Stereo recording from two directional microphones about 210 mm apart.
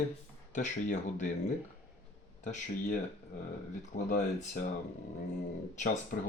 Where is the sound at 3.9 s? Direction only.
40° left (ahead or behind).